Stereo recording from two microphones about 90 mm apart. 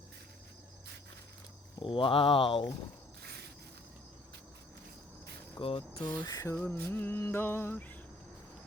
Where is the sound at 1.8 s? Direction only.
75° left (ahead or behind).